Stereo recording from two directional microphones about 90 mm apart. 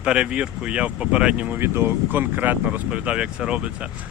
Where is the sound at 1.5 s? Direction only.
25° right (ahead or behind).